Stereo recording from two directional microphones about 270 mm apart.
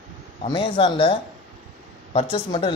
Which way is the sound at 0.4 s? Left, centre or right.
Centre.